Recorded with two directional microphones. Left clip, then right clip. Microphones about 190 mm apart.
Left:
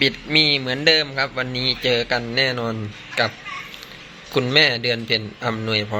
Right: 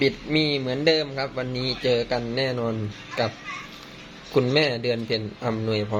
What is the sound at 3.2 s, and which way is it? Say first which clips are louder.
A man's voice: left 5 dB; 5° right (ahead or behind).